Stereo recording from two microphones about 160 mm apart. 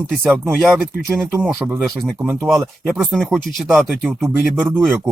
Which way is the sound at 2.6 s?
5° right (ahead or behind).